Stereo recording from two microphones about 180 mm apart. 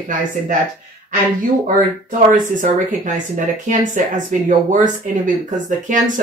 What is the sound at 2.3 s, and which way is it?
Speech, 50° right (ahead or behind).